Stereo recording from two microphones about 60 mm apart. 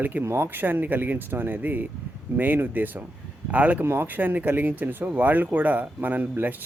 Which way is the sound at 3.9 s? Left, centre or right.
Right.